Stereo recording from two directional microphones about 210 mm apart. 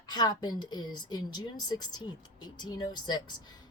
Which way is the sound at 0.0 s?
20° left (ahead or behind).